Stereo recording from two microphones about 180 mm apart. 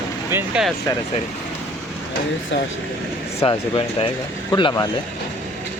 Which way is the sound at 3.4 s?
30° left (ahead or behind).